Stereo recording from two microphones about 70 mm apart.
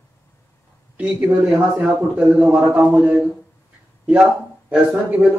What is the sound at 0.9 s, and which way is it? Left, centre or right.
Speech, centre.